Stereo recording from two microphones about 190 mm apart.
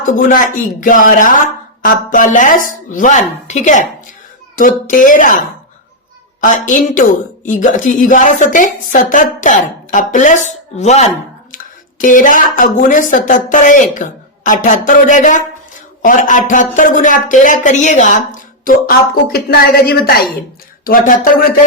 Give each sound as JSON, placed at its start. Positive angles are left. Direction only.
{"t": 0.0, "sound": "a man's voice", "side_deg": 45}
{"t": 6.4, "sound": "a man's voice", "side_deg": 45}